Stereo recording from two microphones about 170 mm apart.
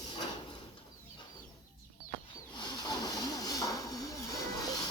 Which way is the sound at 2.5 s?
25° left (ahead or behind).